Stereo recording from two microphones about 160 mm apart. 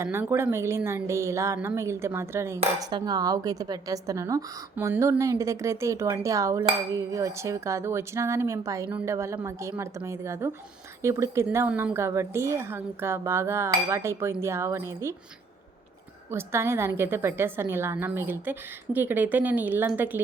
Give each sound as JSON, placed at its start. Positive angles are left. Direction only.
{"t": 0.0, "sound": "a woman's voice", "side_deg": -15}
{"t": 16.3, "sound": "a woman's voice", "side_deg": -15}